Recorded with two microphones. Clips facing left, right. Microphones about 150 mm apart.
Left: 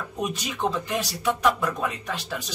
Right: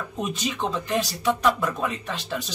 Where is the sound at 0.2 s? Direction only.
10° left (ahead or behind).